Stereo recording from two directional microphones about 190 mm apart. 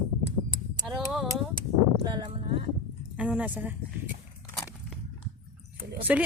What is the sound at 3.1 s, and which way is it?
Speech, 5° right (ahead or behind).